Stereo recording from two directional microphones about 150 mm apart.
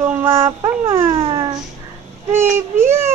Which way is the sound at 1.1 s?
40° right (ahead or behind).